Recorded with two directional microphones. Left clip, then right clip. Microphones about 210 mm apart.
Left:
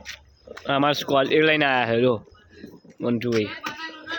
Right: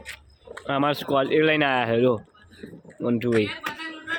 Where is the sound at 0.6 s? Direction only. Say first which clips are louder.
Left 2 dB; 10° left (ahead or behind).